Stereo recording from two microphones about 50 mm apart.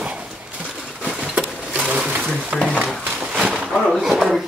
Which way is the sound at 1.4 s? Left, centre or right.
Centre.